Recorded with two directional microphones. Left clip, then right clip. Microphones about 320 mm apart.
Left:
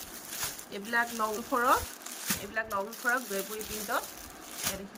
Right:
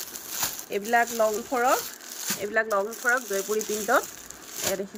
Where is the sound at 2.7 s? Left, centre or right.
Right.